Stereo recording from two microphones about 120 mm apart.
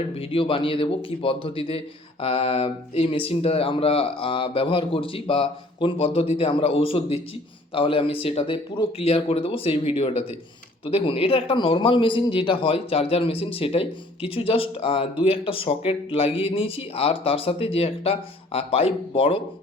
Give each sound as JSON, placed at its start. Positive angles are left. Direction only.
{"t": 0.1, "sound": "speech", "side_deg": 50}